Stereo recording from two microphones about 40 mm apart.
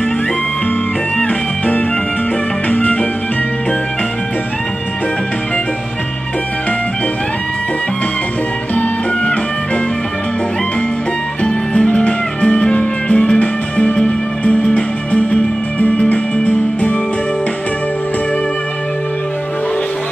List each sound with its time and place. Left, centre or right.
1.1 s music: left
8.7 s music: left
11.4 s music: left